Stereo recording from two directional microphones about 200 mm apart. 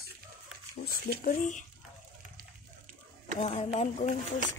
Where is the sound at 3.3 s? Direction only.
35° left (ahead or behind).